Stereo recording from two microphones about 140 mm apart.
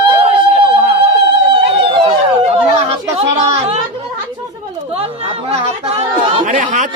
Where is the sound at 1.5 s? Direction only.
40° right (ahead or behind).